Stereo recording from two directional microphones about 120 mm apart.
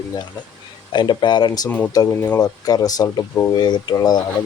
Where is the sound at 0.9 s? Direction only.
40° left (ahead or behind).